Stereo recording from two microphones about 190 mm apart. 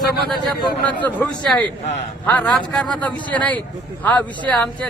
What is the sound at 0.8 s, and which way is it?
Speech, 10° left (ahead or behind).